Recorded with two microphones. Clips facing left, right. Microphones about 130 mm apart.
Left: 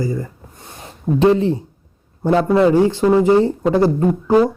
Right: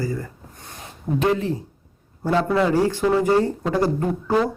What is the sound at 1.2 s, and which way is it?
Speech, 30° left (ahead or behind).